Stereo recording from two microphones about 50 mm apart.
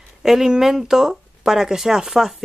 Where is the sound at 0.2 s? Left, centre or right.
Centre.